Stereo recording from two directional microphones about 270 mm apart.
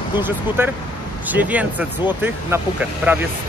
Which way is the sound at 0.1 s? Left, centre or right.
Centre.